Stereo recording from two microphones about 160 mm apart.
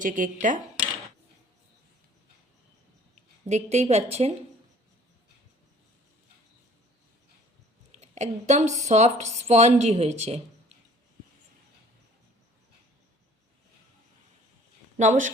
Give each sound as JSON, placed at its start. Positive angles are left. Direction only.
{"t": 0.0, "sound": "speech", "side_deg": -55}
{"t": 3.4, "sound": "speech", "side_deg": -45}
{"t": 7.9, "sound": "speech", "side_deg": -45}
{"t": 14.9, "sound": "speech", "side_deg": -50}